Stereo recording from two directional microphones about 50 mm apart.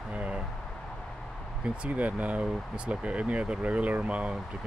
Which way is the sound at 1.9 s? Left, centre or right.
Right.